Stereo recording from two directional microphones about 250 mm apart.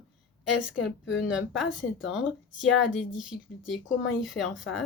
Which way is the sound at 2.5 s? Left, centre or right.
Centre.